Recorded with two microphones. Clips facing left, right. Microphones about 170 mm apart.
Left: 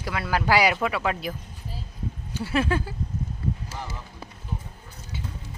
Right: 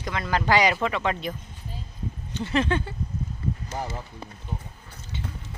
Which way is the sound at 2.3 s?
5° left (ahead or behind).